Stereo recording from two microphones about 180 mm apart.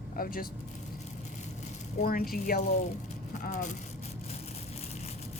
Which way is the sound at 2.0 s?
55° left (ahead or behind).